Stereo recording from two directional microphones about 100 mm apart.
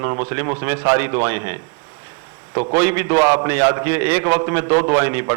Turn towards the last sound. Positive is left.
turn(degrees=-30)  # may be behind; listen again after turning